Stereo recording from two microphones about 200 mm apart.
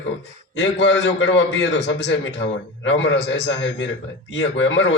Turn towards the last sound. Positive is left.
turn(degrees=65)  # may be behind; listen again after turning